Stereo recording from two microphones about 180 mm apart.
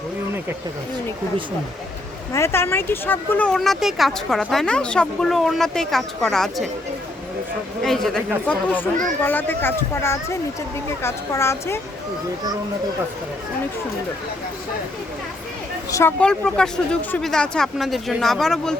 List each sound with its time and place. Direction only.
2.3 s speech: 15° left (ahead or behind)
7.8 s speech: centre (ahead or behind)
15.9 s speech: 15° left (ahead or behind)
16.2 s speech: 5° left (ahead or behind)